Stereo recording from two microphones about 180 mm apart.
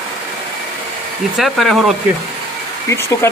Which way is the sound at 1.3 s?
Centre (ahead or behind).